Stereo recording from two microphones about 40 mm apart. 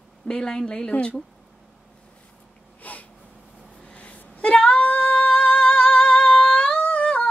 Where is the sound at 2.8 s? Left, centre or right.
Left.